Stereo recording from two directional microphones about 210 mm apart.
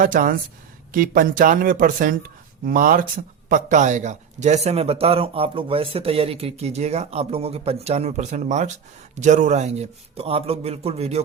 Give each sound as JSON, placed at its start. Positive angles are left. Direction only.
{"t": 0.0, "sound": "a man's voice", "side_deg": -40}